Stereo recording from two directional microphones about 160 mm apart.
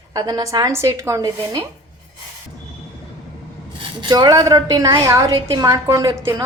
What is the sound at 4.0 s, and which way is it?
A woman's voice, 25° right (ahead or behind).